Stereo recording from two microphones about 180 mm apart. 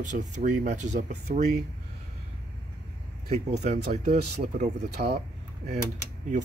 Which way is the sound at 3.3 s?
35° right (ahead or behind).